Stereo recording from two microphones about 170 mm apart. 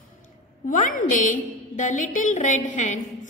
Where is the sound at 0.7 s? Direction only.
50° left (ahead or behind).